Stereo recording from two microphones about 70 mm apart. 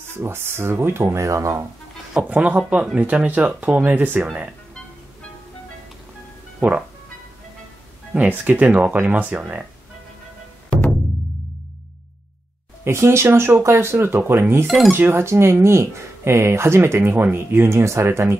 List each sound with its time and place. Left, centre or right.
0.2 s speech: right
2.2 s speech: right
6.6 s speech: right
8.1 s speech: right
12.8 s speech: right